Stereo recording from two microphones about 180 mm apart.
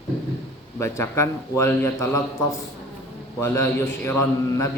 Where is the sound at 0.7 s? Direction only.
15° left (ahead or behind).